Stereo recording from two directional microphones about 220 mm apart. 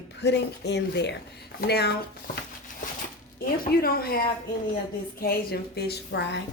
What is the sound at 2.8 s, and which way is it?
A woman's voice, 35° left (ahead or behind).